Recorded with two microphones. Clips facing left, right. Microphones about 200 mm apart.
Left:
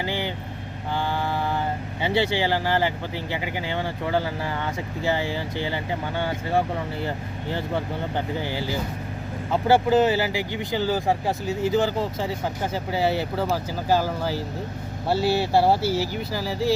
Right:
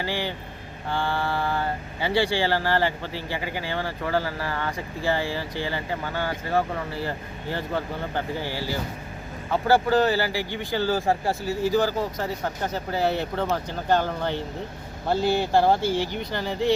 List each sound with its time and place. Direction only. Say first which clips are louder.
0.0 s speech: left 1 dB; 20° left (ahead or behind)
8.1 s speech: left 1 dB; 20° left (ahead or behind)
12.2 s speech: left 1 dB; 5° left (ahead or behind)